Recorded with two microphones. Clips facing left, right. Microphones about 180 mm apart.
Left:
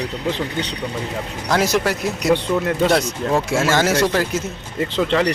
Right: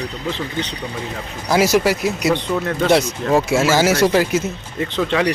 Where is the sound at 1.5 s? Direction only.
5° right (ahead or behind).